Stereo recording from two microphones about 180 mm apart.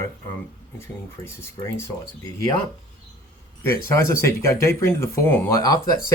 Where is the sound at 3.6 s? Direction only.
15° left (ahead or behind).